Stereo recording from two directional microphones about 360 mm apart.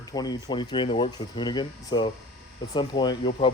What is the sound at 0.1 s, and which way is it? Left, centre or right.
Speech, centre.